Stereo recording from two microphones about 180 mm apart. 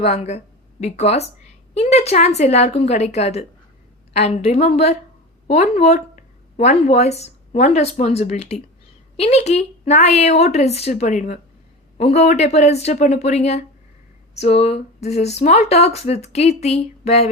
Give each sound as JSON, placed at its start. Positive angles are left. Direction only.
{"t": 0.0, "sound": "speech", "side_deg": 35}